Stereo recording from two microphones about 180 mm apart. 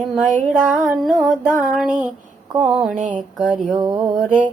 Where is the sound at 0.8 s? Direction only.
Centre (ahead or behind).